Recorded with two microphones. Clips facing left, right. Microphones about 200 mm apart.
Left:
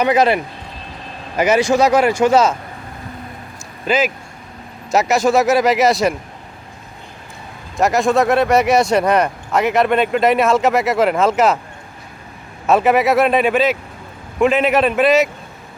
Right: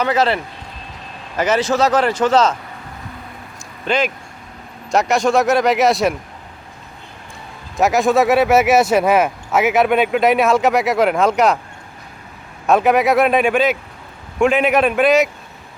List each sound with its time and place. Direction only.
0.0 s a man's voice: 15° left (ahead or behind)
1.4 s a man's voice: 10° left (ahead or behind)
3.8 s speech: 5° left (ahead or behind)
7.8 s speech: centre (ahead or behind)
12.6 s speech: centre (ahead or behind)